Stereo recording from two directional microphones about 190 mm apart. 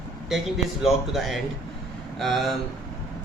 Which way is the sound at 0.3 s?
Centre (ahead or behind).